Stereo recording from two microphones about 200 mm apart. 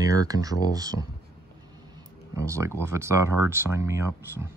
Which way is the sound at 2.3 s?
15° right (ahead or behind).